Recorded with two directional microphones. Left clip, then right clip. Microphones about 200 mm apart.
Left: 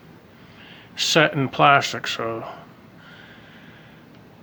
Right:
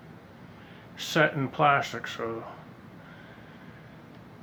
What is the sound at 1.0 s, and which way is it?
Speech, 45° left (ahead or behind).